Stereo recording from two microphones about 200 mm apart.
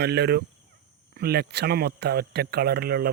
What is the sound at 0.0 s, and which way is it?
Speech, 55° right (ahead or behind).